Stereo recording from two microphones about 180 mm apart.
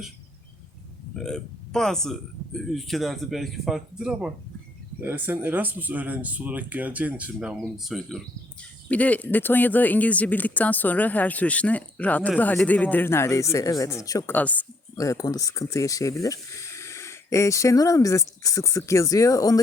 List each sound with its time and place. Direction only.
1.1 s speech: 5° left (ahead or behind); by 19.5 s 20° left (ahead or behind)